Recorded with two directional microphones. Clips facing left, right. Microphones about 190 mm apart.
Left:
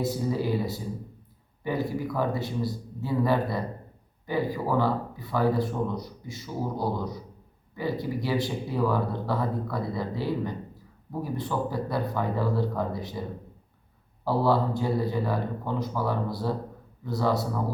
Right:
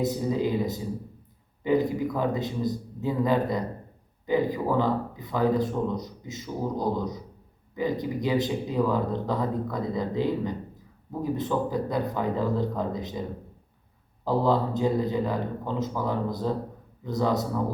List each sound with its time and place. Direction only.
0.0 s speech: 20° right (ahead or behind)
14.3 s speech: 20° right (ahead or behind)